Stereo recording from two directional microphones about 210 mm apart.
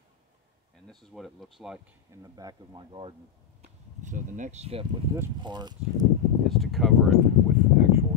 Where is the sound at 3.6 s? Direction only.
35° right (ahead or behind); by 5.7 s 20° right (ahead or behind).